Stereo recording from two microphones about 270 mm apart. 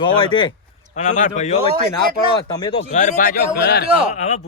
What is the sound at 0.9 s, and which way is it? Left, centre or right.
A man's voice, left.